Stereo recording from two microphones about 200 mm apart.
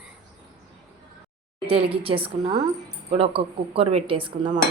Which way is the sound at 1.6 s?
25° right (ahead or behind).